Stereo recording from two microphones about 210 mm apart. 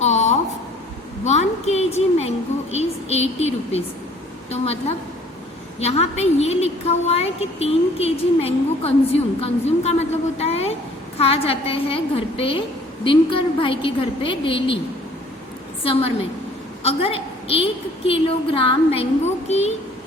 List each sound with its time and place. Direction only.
0.0 s a sound: 30° left (ahead or behind)
2.7 s a woman's voice: 30° left (ahead or behind)
15.8 s a woman's voice: 25° left (ahead or behind)